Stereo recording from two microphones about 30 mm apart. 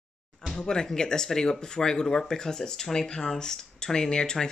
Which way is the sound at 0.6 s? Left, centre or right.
Left.